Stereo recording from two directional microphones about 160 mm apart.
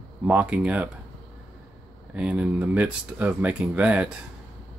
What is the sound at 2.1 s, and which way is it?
Speech, 5° right (ahead or behind).